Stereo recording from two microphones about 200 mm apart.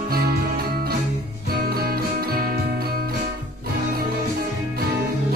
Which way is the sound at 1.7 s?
50° right (ahead or behind).